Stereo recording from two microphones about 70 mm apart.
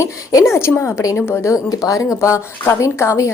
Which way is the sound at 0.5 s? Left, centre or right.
Left.